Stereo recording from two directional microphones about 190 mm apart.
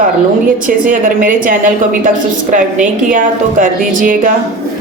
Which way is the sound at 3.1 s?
45° right (ahead or behind).